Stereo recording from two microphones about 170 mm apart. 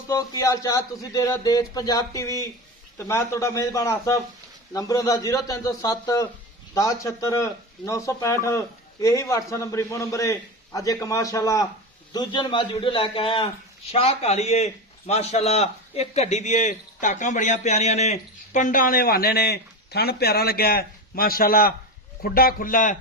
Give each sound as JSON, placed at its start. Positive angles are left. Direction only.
{"t": 0.1, "sound": "a man's voice", "side_deg": 20}